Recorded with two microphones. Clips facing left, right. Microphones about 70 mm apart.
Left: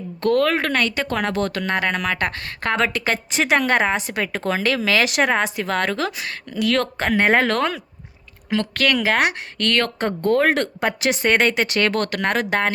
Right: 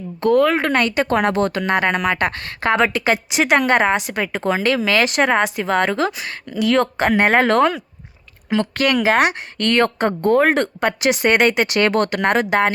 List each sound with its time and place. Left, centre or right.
0.2 s a woman's voice: centre
0.9 s a woman's voice: right
6.1 s a woman's voice: centre
8.4 s a woman's voice: centre
10.6 s speech: centre
11.8 s speech: centre
12.4 s a woman's voice: centre